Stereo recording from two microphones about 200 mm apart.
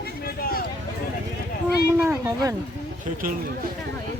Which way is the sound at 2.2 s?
15° right (ahead or behind).